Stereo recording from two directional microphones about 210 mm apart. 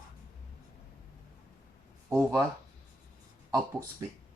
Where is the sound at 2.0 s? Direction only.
15° right (ahead or behind).